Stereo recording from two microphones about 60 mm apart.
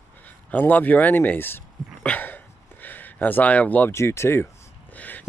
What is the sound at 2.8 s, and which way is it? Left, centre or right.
Speech, left.